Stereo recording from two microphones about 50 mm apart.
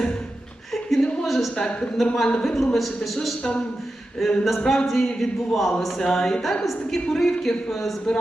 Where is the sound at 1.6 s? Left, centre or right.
Centre.